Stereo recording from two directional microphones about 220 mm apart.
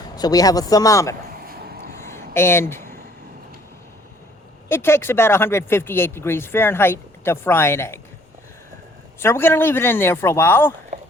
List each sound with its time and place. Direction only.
0.2 s speech: 15° left (ahead or behind)
2.3 s speech: 10° left (ahead or behind)
4.7 s speech: 10° left (ahead or behind)
9.2 s speech: 10° left (ahead or behind)